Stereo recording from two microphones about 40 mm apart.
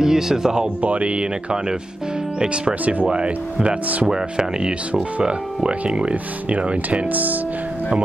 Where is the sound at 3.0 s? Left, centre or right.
Right.